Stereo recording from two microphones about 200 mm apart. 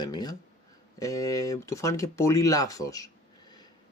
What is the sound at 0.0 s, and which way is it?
Speech, 20° left (ahead or behind).